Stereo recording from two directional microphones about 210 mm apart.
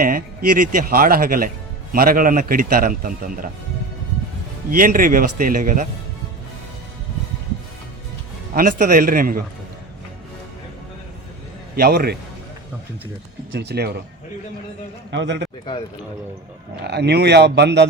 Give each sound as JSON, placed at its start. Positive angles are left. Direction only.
{"t": 0.0, "sound": "a man's voice", "side_deg": -40}
{"t": 4.7, "sound": "a man's voice", "side_deg": -40}
{"t": 8.5, "sound": "speech", "side_deg": -40}
{"t": 11.8, "sound": "speech", "side_deg": -50}
{"t": 13.5, "sound": "speech", "side_deg": -55}
{"t": 15.1, "sound": "a man's voice", "side_deg": -55}
{"t": 16.8, "sound": "speech", "side_deg": -50}